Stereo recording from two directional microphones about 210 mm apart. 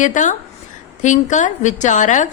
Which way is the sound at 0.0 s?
35° left (ahead or behind).